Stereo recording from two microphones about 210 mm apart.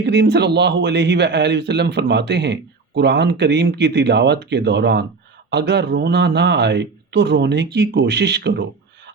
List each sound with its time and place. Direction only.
0.0 s a man's voice: 55° right (ahead or behind)